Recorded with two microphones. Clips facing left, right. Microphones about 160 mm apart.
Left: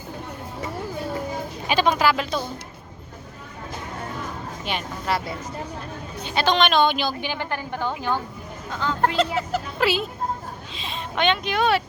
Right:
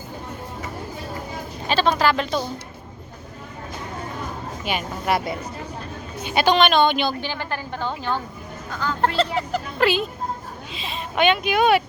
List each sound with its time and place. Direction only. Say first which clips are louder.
1.6 s a woman's voice: right 1 dB; 10° left (ahead or behind)
4.6 s speech: right 3 dB; 5° right (ahead or behind)
6.2 s speech: right 3 dB; 10° right (ahead or behind)
7.1 s a woman's voice: even; 15° left (ahead or behind)
9.0 s speech: right 1 dB; 10° left (ahead or behind); by 11.8 s 10° right (ahead or behind)